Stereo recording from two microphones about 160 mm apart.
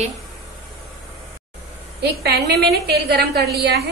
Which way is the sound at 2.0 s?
90° right.